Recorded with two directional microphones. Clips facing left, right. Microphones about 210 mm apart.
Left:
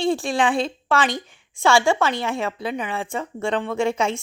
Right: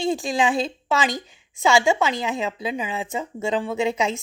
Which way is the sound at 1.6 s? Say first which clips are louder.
Left 1 dB; 20° right (ahead or behind).